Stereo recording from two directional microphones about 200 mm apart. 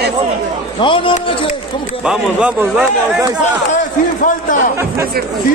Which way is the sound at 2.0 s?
5° right (ahead or behind).